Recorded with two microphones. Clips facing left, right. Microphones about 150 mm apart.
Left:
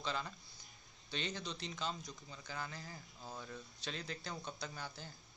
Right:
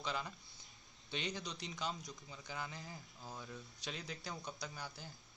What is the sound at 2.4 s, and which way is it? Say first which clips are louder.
Speech: even; 15° right (ahead or behind).